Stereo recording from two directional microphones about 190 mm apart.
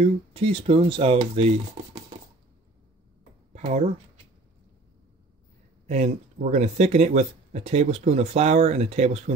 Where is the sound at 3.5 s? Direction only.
40° right (ahead or behind).